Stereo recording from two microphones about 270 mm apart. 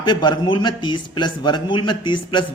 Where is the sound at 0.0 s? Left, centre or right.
Centre.